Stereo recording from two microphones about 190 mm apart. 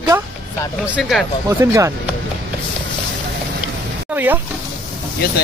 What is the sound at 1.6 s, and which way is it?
Speech, 15° right (ahead or behind).